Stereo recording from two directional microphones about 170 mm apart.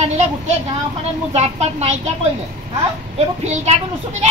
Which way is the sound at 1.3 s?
40° right (ahead or behind).